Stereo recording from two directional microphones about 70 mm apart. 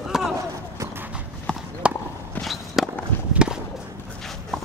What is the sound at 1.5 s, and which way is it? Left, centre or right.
Clip-clop, centre.